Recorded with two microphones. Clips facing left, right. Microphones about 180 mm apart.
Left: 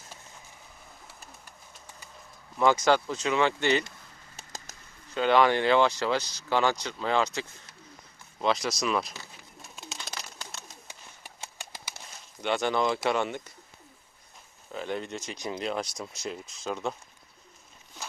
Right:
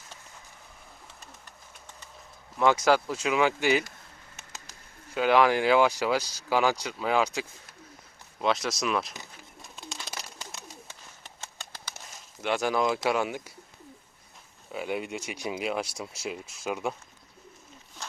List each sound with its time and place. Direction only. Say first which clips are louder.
2.6 s speech: even; centre (ahead or behind)
4.4 s bird: left 4 dB; 40° left (ahead or behind)
5.1 s speech: even; 5° right (ahead or behind)
9.6 s bird: right 1 dB; centre (ahead or behind)
10.8 s a sound: even; 15° left (ahead or behind)
12.4 s speech: even; 5° right (ahead or behind)
14.7 s speech: right 1 dB; 10° right (ahead or behind)